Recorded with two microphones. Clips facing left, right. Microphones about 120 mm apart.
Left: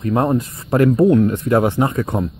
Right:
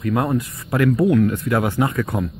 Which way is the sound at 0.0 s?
30° left (ahead or behind).